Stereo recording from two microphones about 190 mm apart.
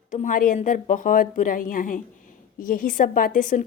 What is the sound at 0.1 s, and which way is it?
A woman's voice, 45° left (ahead or behind).